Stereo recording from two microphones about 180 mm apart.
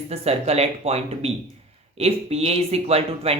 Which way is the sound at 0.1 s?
35° right (ahead or behind).